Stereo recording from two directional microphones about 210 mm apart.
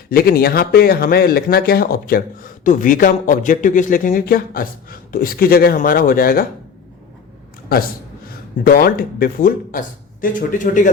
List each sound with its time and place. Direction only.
0.1 s a man's voice: 45° left (ahead or behind)
8.6 s a man's voice: 45° left (ahead or behind)